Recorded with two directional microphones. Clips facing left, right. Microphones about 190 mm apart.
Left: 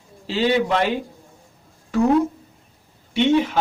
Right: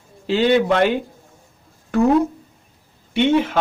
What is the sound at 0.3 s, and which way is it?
Speech, 55° right (ahead or behind).